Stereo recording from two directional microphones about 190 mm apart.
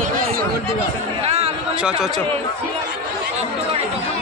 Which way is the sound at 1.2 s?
35° right (ahead or behind).